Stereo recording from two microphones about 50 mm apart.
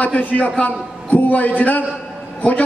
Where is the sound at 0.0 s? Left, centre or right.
Left.